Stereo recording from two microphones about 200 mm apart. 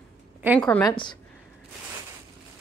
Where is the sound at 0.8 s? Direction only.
20° left (ahead or behind).